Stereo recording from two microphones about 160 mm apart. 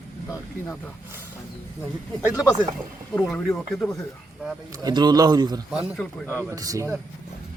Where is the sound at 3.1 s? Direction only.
10° left (ahead or behind).